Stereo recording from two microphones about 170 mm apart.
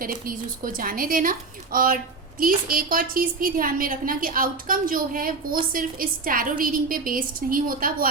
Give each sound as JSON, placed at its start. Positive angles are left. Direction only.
{"t": 0.0, "sound": "a woman's voice", "side_deg": -55}